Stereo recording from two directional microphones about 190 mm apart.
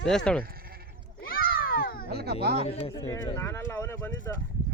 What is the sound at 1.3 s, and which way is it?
Cat, 50° left (ahead or behind).